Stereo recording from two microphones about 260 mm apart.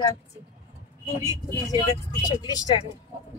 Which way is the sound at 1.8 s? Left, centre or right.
Centre.